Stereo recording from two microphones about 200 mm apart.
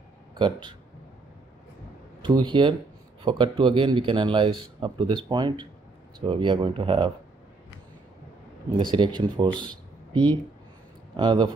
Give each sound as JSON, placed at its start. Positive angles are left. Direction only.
{"t": 0.3, "sound": "speech", "side_deg": -20}
{"t": 2.2, "sound": "speech", "side_deg": -25}
{"t": 8.7, "sound": "speech", "side_deg": -25}